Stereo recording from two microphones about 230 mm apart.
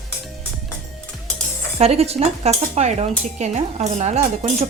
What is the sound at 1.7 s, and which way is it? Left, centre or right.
Speech, right.